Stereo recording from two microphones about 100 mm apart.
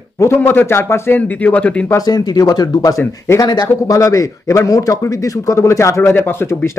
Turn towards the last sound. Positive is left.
turn(degrees=25)  # may be behind; listen again after turning